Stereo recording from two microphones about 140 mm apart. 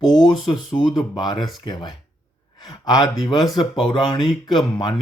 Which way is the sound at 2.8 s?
30° left (ahead or behind).